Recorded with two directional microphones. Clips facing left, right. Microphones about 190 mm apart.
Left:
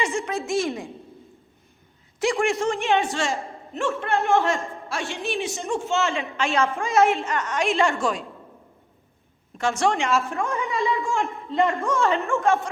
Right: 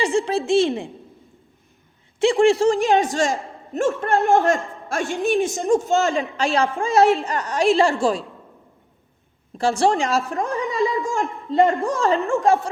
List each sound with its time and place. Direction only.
0.0 s a woman's voice: 35° right (ahead or behind)
2.1 s a woman's voice: 30° right (ahead or behind)
4.5 s a man's voice: 50° right (ahead or behind); by 8.2 s 35° right (ahead or behind)
9.6 s a woman's voice: 35° right (ahead or behind)